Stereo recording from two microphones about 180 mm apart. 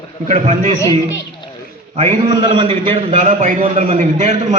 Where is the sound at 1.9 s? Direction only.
30° right (ahead or behind).